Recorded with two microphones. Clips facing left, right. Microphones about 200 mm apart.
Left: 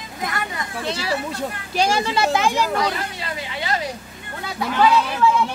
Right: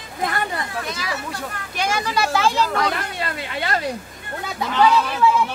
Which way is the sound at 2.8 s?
60° right (ahead or behind).